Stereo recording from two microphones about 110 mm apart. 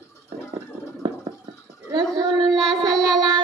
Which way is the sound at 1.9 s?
40° right (ahead or behind).